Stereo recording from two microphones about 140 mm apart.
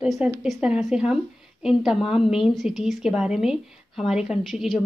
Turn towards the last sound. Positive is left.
turn(degrees=0)  # may be behind; listen again after turning